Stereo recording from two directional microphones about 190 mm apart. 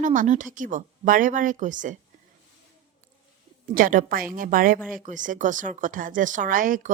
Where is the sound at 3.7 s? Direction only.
45° right (ahead or behind).